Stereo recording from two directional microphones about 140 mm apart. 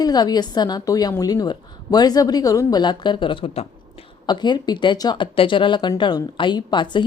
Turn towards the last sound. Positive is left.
turn(degrees=35)  # may be behind; listen again after turning